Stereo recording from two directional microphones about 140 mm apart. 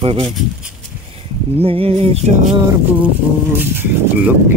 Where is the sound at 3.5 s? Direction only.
15° right (ahead or behind).